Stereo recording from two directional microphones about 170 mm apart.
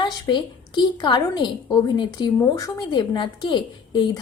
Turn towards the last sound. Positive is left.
turn(degrees=25)  # may be behind; listen again after turning